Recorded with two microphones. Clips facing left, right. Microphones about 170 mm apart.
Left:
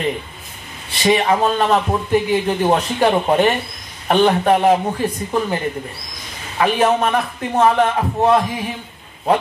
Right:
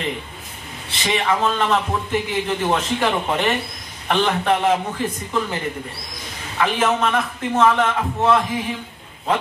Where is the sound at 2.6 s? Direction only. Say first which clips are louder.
Left 4 dB; 40° left (ahead or behind).